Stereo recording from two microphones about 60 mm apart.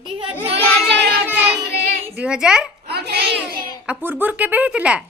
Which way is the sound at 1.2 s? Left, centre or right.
Right.